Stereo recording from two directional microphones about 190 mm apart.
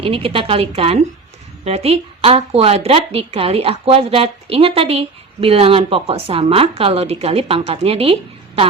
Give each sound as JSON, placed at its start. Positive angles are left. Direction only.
{"t": 0.0, "sound": "a woman's voice", "side_deg": -30}